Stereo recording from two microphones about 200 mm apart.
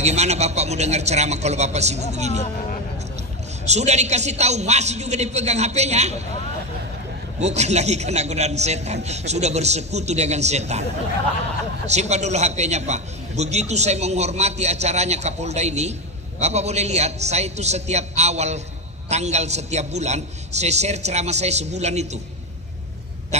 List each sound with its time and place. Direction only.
0.0 s a man's voice: 35° right (ahead or behind)
3.6 s a man's voice: 35° right (ahead or behind)
7.3 s a man's voice: 35° right (ahead or behind)
11.8 s a man's voice: 35° right (ahead or behind)